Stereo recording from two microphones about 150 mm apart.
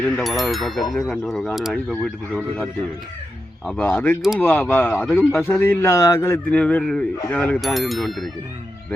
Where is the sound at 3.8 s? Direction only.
10° left (ahead or behind).